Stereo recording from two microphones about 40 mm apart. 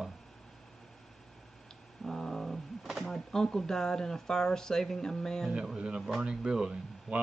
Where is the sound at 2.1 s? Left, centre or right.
Centre.